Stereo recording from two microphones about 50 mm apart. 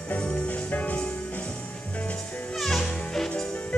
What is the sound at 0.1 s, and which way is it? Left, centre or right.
Music, left.